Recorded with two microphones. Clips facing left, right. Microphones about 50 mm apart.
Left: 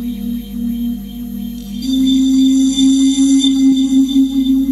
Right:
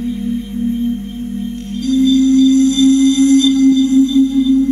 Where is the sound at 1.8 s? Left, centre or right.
Right.